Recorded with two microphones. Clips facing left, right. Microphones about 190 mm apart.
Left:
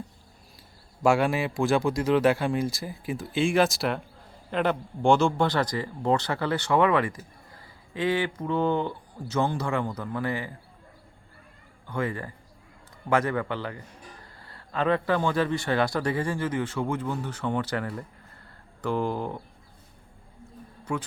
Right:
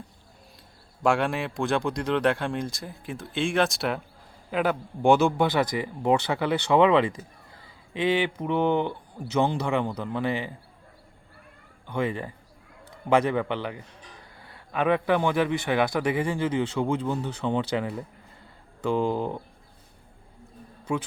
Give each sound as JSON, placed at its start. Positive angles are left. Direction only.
{"t": 1.0, "sound": "a man's voice", "side_deg": 0}
{"t": 11.9, "sound": "a man's voice", "side_deg": -20}